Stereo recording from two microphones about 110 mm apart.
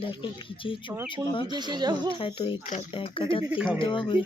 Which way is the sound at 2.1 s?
55° left (ahead or behind).